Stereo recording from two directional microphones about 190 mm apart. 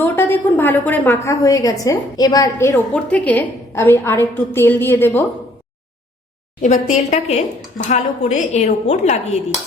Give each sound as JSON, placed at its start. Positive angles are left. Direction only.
{"t": 0.0, "sound": "a woman's voice", "side_deg": 10}
{"t": 6.9, "sound": "a woman's voice", "side_deg": 35}